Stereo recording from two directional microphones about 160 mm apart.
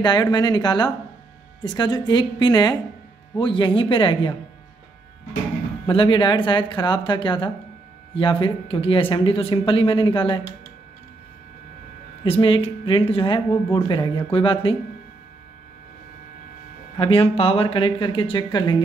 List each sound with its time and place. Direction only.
0.0 s speech: 25° left (ahead or behind)
5.9 s speech: 30° left (ahead or behind)
12.3 s speech: 35° left (ahead or behind)
16.9 s speech: 35° left (ahead or behind)